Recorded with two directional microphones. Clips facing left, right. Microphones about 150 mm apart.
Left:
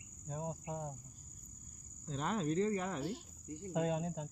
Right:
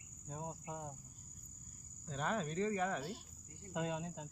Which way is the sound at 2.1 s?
30° left (ahead or behind).